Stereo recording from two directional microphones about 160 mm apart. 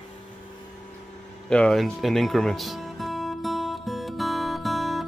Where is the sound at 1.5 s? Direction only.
5° left (ahead or behind).